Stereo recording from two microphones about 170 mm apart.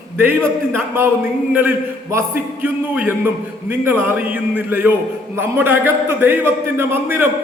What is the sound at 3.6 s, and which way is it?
A man's voice, 10° right (ahead or behind).